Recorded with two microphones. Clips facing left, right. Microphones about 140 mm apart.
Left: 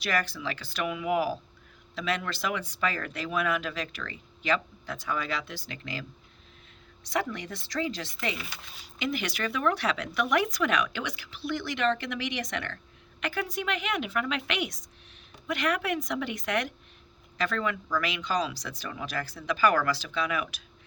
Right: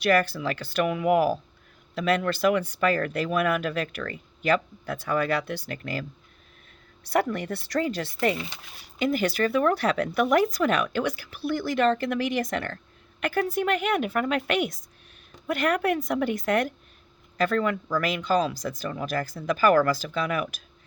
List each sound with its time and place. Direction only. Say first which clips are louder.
0.0 s speech: right 8 dB; 55° right (ahead or behind)
7.1 s speech: right 6 dB; 55° right (ahead or behind)